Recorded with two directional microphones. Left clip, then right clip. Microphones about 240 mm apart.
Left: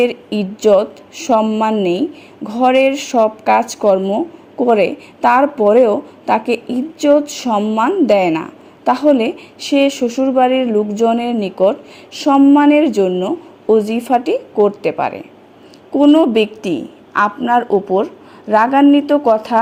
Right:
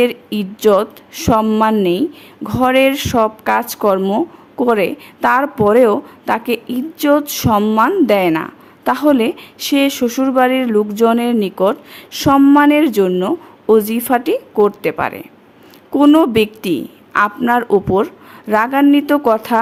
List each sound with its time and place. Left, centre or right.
0.0 s a woman's voice: centre
15.9 s a woman's voice: right